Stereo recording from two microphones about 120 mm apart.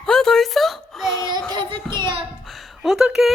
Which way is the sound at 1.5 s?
40° right (ahead or behind).